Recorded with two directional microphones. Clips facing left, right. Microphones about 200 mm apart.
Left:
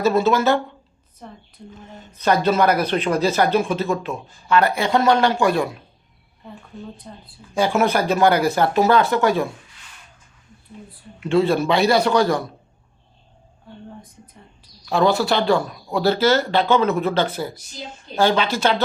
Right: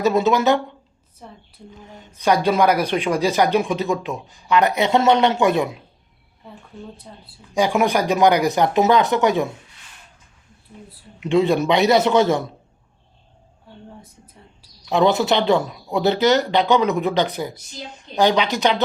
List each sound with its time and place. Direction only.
0.0 s speech: 15° right (ahead or behind)
1.2 s speech: centre (ahead or behind)
1.9 s speech: 15° right (ahead or behind)
7.1 s speech: centre (ahead or behind)
7.5 s speech: 15° right (ahead or behind)
11.2 s a man's voice: 15° right (ahead or behind)
14.8 s speech: 20° right (ahead or behind)